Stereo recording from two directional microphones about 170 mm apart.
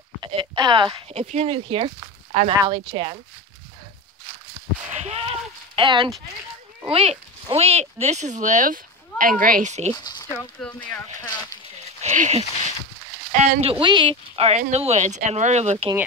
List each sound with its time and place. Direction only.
0.2 s speech: 25° right (ahead or behind)
1.1 s speech: 40° right (ahead or behind)
5.0 s a sound: 35° right (ahead or behind)
5.8 s speech: 30° right (ahead or behind)
10.0 s speech: 25° left (ahead or behind)
10.6 s speech: centre (ahead or behind)
12.0 s speech: 45° right (ahead or behind)